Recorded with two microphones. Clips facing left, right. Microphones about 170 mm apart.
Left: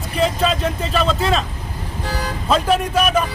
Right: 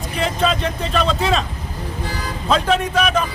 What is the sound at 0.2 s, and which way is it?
Speech, centre (ahead or behind).